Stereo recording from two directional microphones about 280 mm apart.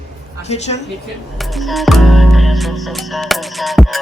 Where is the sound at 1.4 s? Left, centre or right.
Centre.